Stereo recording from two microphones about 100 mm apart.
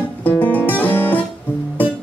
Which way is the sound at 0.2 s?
20° left (ahead or behind).